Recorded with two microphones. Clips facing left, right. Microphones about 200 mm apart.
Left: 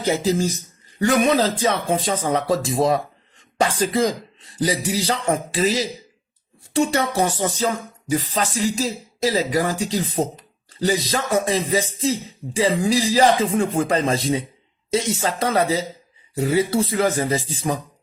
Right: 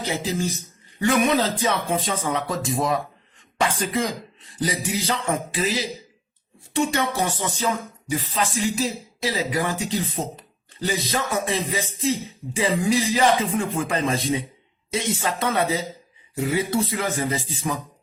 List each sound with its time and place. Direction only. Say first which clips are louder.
0.0 s speech: left 6 dB; 40° left (ahead or behind)
8.1 s speech: left 3 dB; 40° left (ahead or behind)